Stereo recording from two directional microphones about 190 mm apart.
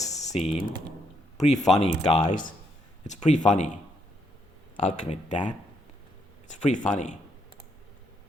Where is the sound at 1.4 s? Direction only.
35° left (ahead or behind).